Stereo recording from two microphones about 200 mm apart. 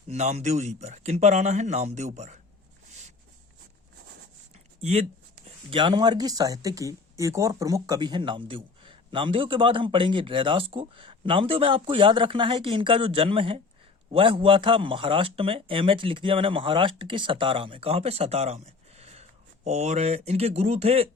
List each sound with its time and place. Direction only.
0.1 s speech: 35° right (ahead or behind)
4.8 s speech: 35° right (ahead or behind)